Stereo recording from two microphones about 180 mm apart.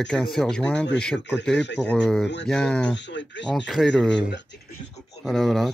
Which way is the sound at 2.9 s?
85° left.